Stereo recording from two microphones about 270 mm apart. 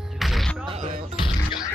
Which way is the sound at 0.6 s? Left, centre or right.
Right.